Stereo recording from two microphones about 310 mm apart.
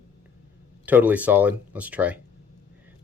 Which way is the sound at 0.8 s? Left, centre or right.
Centre.